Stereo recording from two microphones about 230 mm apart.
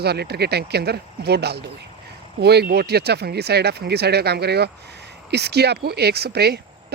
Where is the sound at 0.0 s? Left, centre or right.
Right.